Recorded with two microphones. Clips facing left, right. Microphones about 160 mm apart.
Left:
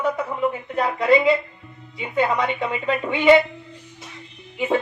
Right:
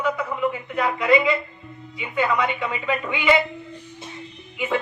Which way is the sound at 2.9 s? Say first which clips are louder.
Left 4 dB; 35° left (ahead or behind).